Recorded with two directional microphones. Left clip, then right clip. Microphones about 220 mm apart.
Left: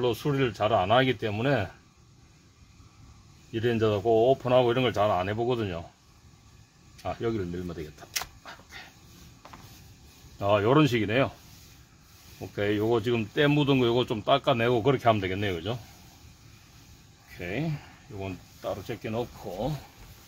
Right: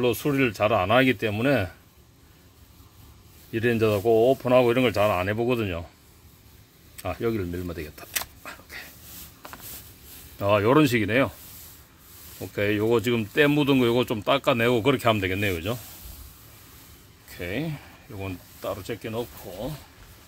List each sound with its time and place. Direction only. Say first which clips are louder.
0.0 s speech: right 4 dB; 35° right (ahead or behind)
3.5 s speech: right 3 dB; 30° right (ahead or behind)
7.0 s speech: right 3 dB; 35° right (ahead or behind)
8.5 s a sound: right 5 dB; 30° right (ahead or behind)
10.4 s speech: right 3 dB; 30° right (ahead or behind)
12.4 s speech: right 3 dB; 30° right (ahead or behind)
17.4 s speech: right 2 dB; 30° right (ahead or behind)